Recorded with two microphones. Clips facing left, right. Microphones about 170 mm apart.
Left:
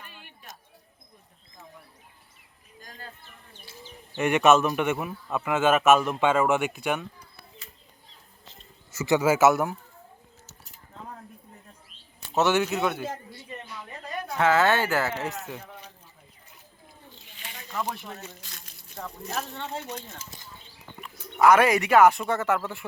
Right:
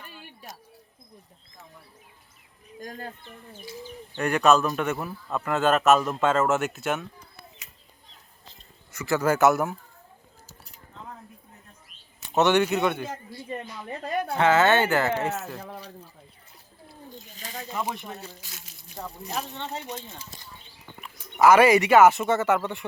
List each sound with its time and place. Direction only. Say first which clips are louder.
2.8 s speech: right 9 dB; 45° right (ahead or behind)
4.2 s speech: left 1 dB; centre (ahead or behind)
4.8 s a man's voice: left 1 dB; 15° left (ahead or behind)
5.0 s speech: even; 5° left (ahead or behind)
8.9 s a man's voice: left 3 dB; 20° left (ahead or behind)
9.2 s speech: right 1 dB; 5° left (ahead or behind)
12.3 s speech: right 2 dB; 5° left (ahead or behind)
14.3 s speech: right 2 dB; centre (ahead or behind)
17.2 s snake: right 7 dB; 40° right (ahead or behind)
17.7 s speech: even; 10° right (ahead or behind)
19.8 s speech: right 1 dB; 20° right (ahead or behind)
21.4 s speech: right 2 dB; centre (ahead or behind)